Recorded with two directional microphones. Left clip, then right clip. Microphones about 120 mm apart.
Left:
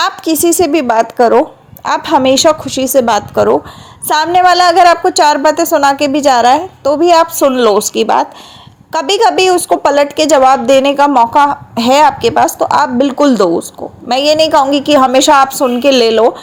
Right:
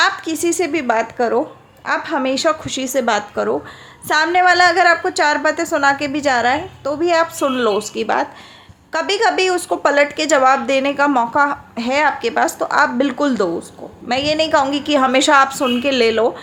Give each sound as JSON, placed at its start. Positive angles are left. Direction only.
{"t": 0.0, "sound": "a woman's voice", "side_deg": 35}
{"t": 1.8, "sound": "a woman's voice", "side_deg": 50}
{"t": 2.6, "sound": "a woman's voice", "side_deg": 25}